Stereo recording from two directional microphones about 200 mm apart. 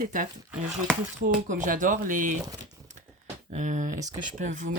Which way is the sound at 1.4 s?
40° right (ahead or behind).